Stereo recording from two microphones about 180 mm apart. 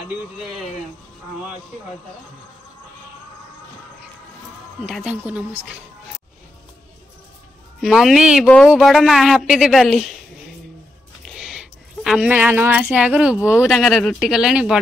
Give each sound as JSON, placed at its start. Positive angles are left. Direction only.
{"t": 4.9, "sound": "speech", "side_deg": -5}
{"t": 7.8, "sound": "a woman's voice", "side_deg": 0}
{"t": 11.2, "sound": "speech", "side_deg": -5}